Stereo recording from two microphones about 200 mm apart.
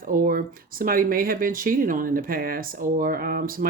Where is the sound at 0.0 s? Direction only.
45° right (ahead or behind).